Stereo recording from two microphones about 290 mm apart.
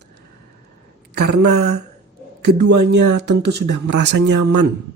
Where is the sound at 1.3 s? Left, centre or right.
Right.